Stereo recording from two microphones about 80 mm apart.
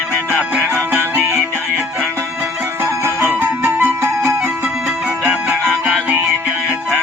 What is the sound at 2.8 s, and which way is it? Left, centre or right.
Music, right.